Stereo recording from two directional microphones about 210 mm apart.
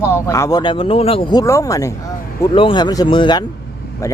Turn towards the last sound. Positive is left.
turn(degrees=15)  # may be behind; listen again after turning